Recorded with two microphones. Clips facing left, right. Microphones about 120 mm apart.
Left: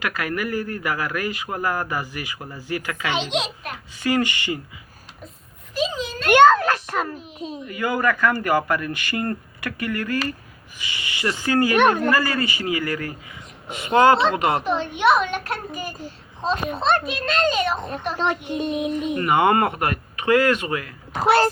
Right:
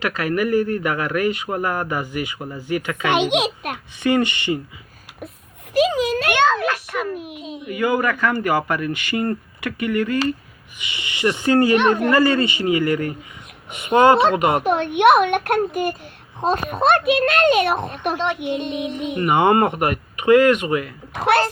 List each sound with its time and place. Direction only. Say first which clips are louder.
0.0 s speech: right 5 dB; 25° right (ahead or behind)
3.1 s a woman's voice: right 7 dB; 60° right (ahead or behind)
4.0 s speech: right 3 dB; 25° right (ahead or behind)
5.7 s a sound: right 8 dB; 70° right (ahead or behind)
6.3 s a sound: left 7 dB; 45° left (ahead or behind)
6.9 s a child's voice: left 1 dB; 45° left (ahead or behind)
7.6 s speech: right 3 dB; 20° right (ahead or behind)
13.7 s speech: left 4 dB; 30° left (ahead or behind)
13.9 s a woman's voice: right 2 dB; 20° right (ahead or behind)
14.6 s a woman's voice: right 5 dB; 60° right (ahead or behind)
18.6 s a sound: left 1 dB; 40° left (ahead or behind)
19.2 s speech: right 3 dB; 25° right (ahead or behind)